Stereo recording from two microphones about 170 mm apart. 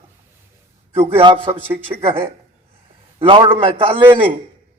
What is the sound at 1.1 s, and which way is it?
Speech, 30° right (ahead or behind).